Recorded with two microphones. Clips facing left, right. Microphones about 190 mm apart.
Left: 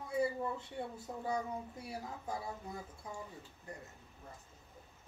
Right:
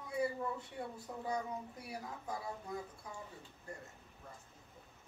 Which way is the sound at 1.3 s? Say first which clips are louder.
Left 2 dB; 25° left (ahead or behind).